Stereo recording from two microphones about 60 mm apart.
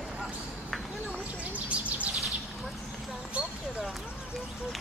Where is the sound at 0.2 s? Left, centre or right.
Centre.